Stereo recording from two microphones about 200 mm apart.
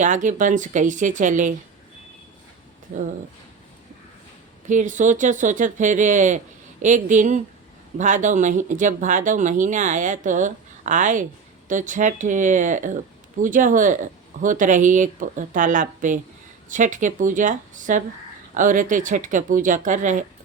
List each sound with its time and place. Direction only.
0.0 s speech: 40° right (ahead or behind)
4.7 s speech: 40° right (ahead or behind)